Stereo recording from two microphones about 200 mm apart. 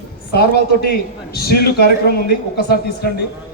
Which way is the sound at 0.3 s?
50° left (ahead or behind).